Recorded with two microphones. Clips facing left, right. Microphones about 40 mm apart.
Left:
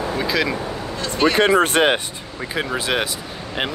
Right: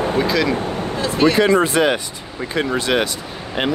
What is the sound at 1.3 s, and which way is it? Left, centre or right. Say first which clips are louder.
Speech: right 1 dB; left.